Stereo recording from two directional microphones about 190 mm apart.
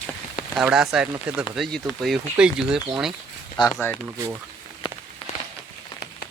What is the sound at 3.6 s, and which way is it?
Speech, 25° left (ahead or behind).